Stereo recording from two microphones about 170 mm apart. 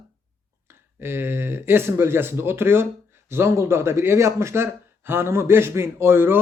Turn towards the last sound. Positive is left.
turn(degrees=-15)  # may be behind; listen again after turning